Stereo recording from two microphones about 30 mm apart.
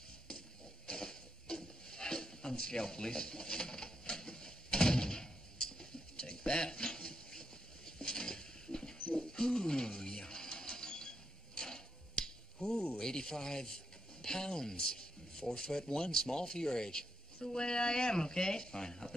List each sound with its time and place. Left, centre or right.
0.8 s a sound: left
9.1 s mechanisms: left
13.0 s speech: left